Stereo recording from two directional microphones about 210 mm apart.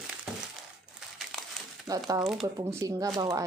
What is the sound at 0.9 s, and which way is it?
Crumpling, centre (ahead or behind).